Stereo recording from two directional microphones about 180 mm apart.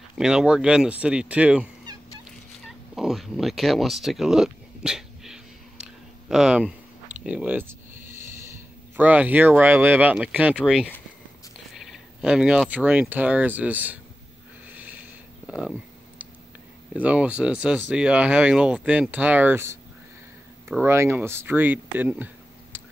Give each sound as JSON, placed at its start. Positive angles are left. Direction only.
{"t": 0.2, "sound": "speech", "side_deg": -5}
{"t": 3.0, "sound": "a sound", "side_deg": 0}
{"t": 8.9, "sound": "speech", "side_deg": -10}
{"t": 14.7, "sound": "snort", "side_deg": -10}
{"t": 15.4, "sound": "a sound", "side_deg": -5}
{"t": 17.0, "sound": "speech", "side_deg": -5}
{"t": 20.8, "sound": "speech", "side_deg": -15}